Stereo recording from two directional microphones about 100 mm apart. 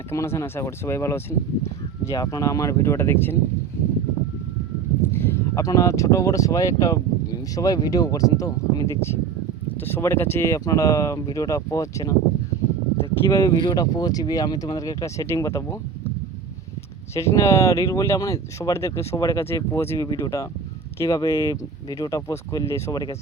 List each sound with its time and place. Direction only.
0.1 s speech: 30° left (ahead or behind)
2.1 s speech: 40° left (ahead or behind)
5.1 s speech: 25° left (ahead or behind)
13.2 s speech: 30° left (ahead or behind)
13.5 s speech: 45° left (ahead or behind); by 16.1 s 30° left (ahead or behind)
17.2 s speech: 30° left (ahead or behind)